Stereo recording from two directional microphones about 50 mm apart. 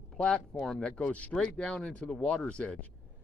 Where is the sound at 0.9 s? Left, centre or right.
Left.